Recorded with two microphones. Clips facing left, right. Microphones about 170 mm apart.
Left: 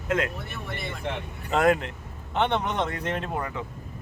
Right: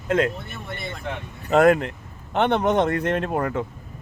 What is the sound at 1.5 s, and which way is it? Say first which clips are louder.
Speech: right 6 dB; 55° right (ahead or behind).